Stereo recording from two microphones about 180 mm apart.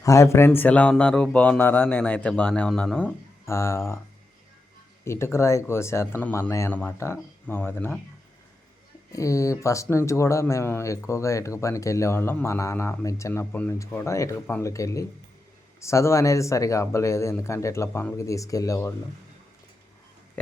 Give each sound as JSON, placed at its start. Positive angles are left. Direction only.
{"t": 0.0, "sound": "speech", "side_deg": 15}
{"t": 3.4, "sound": "speech", "side_deg": 15}
{"t": 5.0, "sound": "speech", "side_deg": 15}
{"t": 9.1, "sound": "speech", "side_deg": 15}